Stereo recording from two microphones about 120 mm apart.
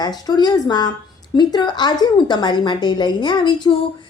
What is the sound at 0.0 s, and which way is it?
A woman's voice, 35° left (ahead or behind).